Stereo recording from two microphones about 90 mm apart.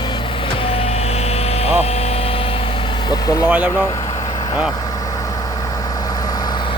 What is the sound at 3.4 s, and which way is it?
Speech, 15° right (ahead or behind).